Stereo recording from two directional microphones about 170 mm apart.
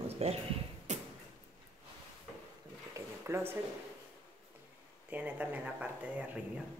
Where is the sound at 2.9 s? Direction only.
15° right (ahead or behind).